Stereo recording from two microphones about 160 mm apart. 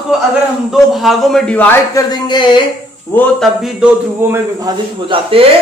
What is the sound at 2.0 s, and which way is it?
Speech, 25° left (ahead or behind).